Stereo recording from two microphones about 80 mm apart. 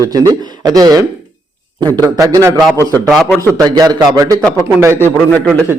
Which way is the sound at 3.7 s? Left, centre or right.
Right.